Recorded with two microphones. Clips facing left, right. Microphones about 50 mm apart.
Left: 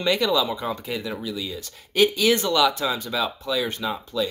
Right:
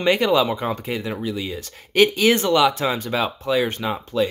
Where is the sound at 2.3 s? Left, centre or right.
Right.